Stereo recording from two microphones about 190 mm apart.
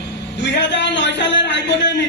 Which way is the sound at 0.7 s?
70° left (ahead or behind).